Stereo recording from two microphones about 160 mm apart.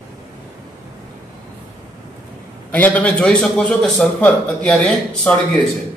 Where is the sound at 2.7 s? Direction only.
10° left (ahead or behind).